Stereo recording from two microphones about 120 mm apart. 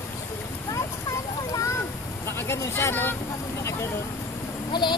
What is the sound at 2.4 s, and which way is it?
Vehicle, 20° left (ahead or behind).